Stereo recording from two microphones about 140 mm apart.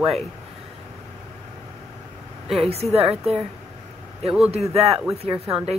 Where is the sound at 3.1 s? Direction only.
5° right (ahead or behind).